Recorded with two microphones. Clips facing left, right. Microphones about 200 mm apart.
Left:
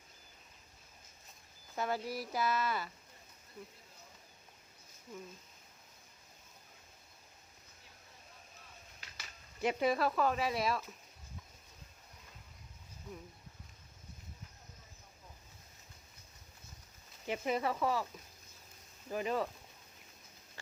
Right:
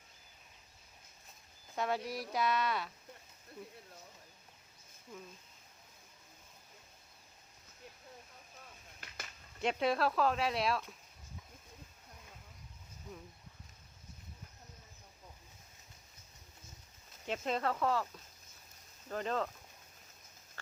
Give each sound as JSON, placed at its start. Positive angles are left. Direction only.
{"t": 1.7, "sound": "speech", "side_deg": 0}
{"t": 9.0, "sound": "finger snapping", "side_deg": -55}
{"t": 9.6, "sound": "speech", "side_deg": 5}
{"t": 17.2, "sound": "speech", "side_deg": 10}
{"t": 19.0, "sound": "speech", "side_deg": 10}